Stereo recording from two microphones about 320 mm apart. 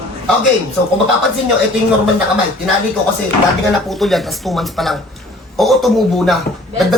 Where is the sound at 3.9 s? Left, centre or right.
Centre.